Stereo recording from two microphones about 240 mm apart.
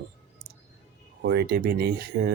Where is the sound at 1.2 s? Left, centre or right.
Right.